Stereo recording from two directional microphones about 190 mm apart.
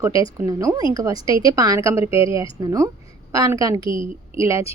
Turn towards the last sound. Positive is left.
turn(degrees=-15)  # may be behind; listen again after turning